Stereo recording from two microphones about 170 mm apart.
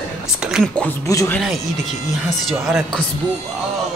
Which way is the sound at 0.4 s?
5° right (ahead or behind).